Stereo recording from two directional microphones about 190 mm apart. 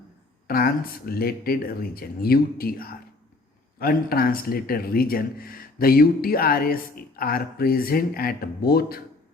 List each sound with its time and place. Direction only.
0.4 s speech: 50° left (ahead or behind)